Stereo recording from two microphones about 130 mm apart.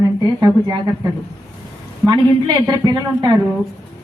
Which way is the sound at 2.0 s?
30° right (ahead or behind).